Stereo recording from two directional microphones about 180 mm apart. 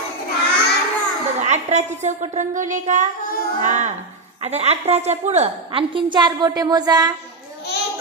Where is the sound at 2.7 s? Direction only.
45° right (ahead or behind).